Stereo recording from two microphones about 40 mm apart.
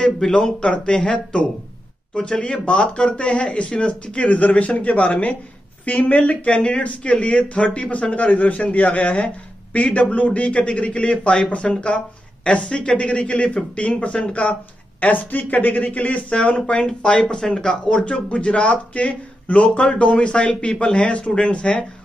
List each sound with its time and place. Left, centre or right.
0.3 s a man's voice: left
16.8 s speech: left